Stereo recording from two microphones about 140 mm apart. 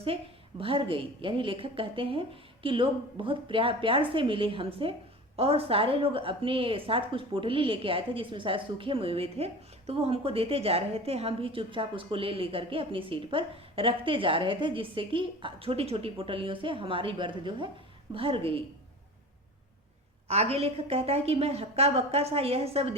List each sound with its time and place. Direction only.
0.6 s a woman's voice: 40° right (ahead or behind)
20.2 s a woman's voice: 45° right (ahead or behind)